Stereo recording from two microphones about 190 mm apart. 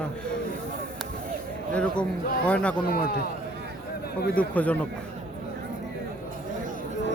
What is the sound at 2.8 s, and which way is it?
Speech, 55° left (ahead or behind).